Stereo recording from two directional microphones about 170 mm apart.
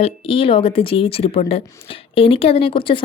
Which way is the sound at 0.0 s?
30° left (ahead or behind).